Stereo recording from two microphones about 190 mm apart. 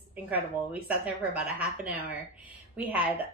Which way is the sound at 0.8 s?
10° right (ahead or behind).